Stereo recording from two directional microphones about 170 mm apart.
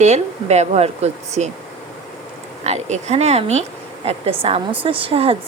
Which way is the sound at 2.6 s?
40° right (ahead or behind).